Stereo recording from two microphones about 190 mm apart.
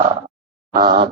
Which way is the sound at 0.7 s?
25° right (ahead or behind).